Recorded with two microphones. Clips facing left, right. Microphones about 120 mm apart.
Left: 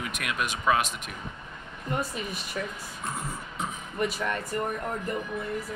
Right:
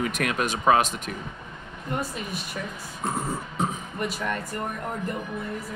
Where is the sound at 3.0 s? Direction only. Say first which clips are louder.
Right 7 dB; 35° right (ahead or behind).